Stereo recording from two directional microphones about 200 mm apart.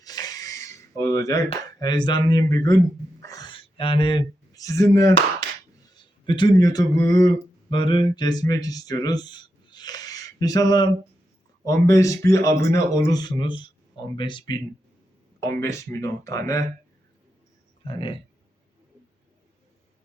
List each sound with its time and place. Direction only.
0.0 s a sound: 20° left (ahead or behind)
1.8 s speech: 20° left (ahead or behind)
3.2 s gasp: 15° left (ahead or behind)
5.9 s speech: 25° left (ahead or behind)
17.8 s speech: 25° left (ahead or behind)